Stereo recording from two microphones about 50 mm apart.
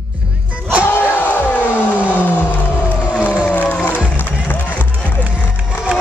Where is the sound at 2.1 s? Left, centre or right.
Left.